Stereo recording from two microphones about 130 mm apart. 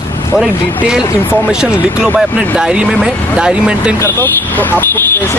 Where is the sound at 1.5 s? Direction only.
5° right (ahead or behind).